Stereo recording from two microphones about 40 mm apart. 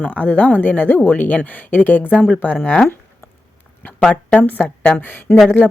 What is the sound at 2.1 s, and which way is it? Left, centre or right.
Speech, left.